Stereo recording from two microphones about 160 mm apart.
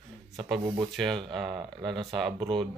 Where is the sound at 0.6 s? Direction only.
30° right (ahead or behind).